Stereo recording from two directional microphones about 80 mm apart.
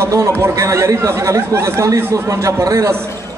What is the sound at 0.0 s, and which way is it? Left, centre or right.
Speech, right.